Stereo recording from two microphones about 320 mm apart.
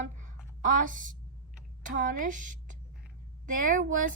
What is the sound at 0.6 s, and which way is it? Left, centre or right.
A woman's voice, right.